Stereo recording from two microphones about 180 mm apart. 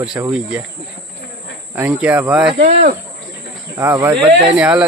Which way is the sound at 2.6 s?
35° right (ahead or behind).